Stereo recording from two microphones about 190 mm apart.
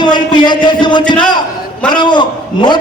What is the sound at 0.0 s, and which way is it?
A man's voice, 25° left (ahead or behind).